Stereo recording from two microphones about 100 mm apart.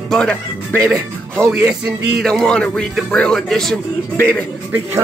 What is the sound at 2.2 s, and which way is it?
Speech, 5° left (ahead or behind).